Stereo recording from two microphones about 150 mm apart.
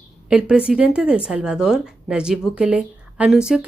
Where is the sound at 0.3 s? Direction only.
5° right (ahead or behind).